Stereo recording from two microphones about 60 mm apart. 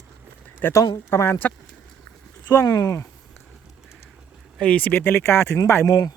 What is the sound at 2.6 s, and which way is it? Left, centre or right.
Speech, left.